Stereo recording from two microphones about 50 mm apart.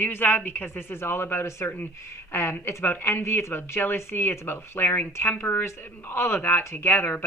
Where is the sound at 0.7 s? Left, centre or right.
Left.